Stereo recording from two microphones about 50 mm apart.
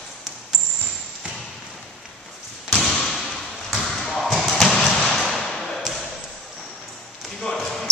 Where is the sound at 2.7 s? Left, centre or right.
Centre.